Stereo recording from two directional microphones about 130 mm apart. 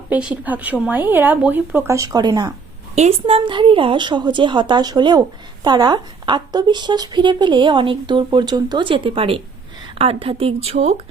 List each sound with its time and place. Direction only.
0.1 s speech: 10° right (ahead or behind); by 2.5 s 30° right (ahead or behind)
2.9 s speech: 50° right (ahead or behind)